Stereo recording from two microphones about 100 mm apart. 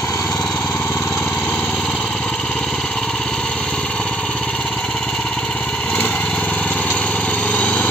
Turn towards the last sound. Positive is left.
turn(degrees=15)  # may be behind; listen again after turning